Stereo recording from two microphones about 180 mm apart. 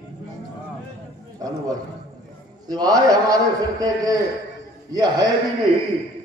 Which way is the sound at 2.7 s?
20° right (ahead or behind).